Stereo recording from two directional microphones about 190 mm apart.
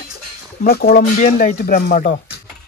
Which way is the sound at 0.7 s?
50° left (ahead or behind).